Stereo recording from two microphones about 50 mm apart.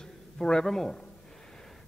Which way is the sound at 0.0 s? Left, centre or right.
Centre.